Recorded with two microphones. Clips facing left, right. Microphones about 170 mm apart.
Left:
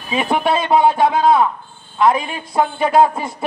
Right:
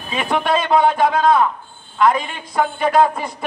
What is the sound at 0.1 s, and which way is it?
Speech, 5° left (ahead or behind).